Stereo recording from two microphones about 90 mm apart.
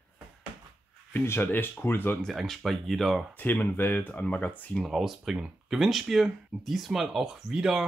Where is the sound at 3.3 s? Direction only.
20° left (ahead or behind).